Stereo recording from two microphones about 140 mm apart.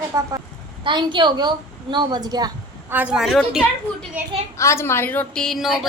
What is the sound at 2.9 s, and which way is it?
Speech, 10° right (ahead or behind).